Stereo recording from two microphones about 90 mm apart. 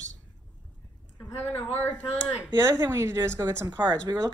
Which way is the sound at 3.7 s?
50° right (ahead or behind).